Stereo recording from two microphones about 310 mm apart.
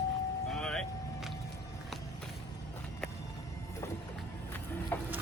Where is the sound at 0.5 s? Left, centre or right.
Centre.